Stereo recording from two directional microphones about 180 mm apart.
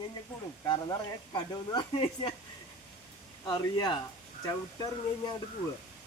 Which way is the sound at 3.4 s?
25° left (ahead or behind).